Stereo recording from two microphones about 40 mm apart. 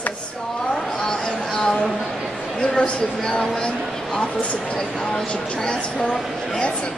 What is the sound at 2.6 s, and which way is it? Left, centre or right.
Speech, centre.